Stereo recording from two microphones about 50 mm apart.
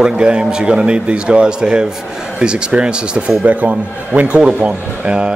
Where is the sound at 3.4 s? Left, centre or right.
Right.